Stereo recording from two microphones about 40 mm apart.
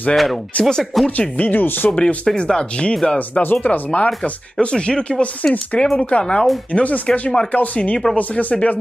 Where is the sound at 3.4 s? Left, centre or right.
Left.